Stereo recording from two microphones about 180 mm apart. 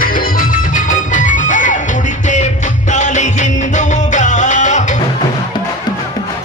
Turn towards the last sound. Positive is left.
turn(degrees=40)  # may be behind; listen again after turning